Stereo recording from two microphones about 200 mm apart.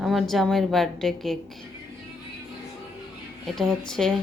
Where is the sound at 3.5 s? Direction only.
5° left (ahead or behind).